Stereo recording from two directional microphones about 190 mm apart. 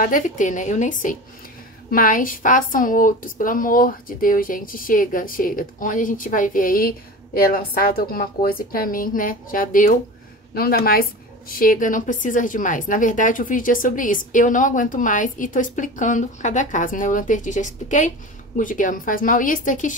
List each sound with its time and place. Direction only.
0.0 s a woman's voice: 45° left (ahead or behind)